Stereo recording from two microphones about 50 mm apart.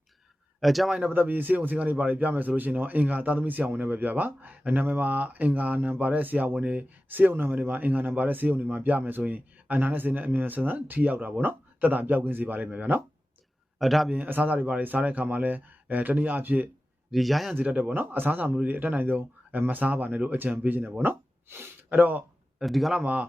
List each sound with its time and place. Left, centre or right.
0.6 s speech: centre
1.0 s speech: right
13.7 s a man's voice: centre
14.1 s speech: right
17.1 s a man's voice: centre
17.9 s speech: right
21.0 s a sound: right
21.8 s speech: right
22.6 s a man's voice: centre